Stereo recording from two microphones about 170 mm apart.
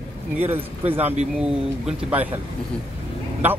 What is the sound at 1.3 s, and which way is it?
Speech, 5° right (ahead or behind).